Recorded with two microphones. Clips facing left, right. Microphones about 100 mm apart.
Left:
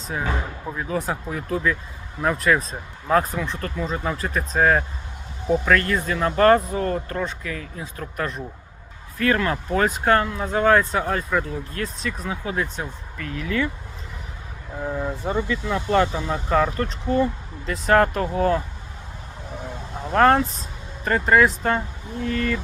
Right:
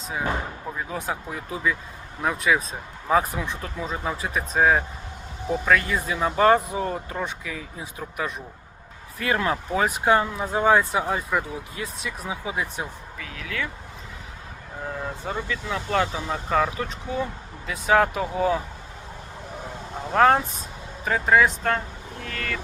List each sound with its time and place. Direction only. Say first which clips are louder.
0.8 s speech: left 5 dB; centre (ahead or behind)
14.8 s speech: left 5 dB; 10° left (ahead or behind)
20.1 s speech: left 2 dB; 5° right (ahead or behind)